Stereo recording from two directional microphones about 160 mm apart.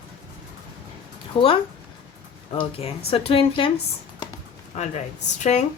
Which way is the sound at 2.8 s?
35° left (ahead or behind).